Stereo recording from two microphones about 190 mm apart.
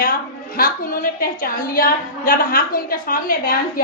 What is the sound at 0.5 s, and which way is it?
A woman's voice, 50° left (ahead or behind).